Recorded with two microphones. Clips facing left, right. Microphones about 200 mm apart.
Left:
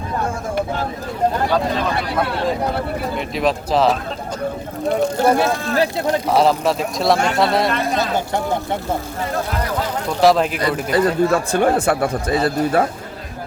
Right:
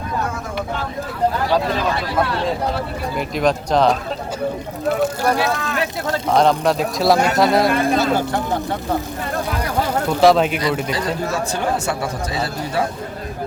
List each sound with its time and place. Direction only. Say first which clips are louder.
3.2 s speech: right 3 dB; centre (ahead or behind)
5.5 s speech: left 4 dB; 35° left (ahead or behind)
6.2 s speech: right 2 dB; 5° left (ahead or behind)
10.1 s speech: right 1 dB; centre (ahead or behind)
10.9 s speech: left 7 dB; 55° left (ahead or behind)